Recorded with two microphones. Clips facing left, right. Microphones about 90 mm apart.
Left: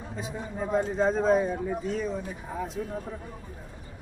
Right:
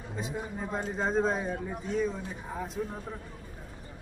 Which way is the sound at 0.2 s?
5° left (ahead or behind).